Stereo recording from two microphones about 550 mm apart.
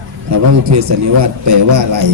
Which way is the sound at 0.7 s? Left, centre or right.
Right.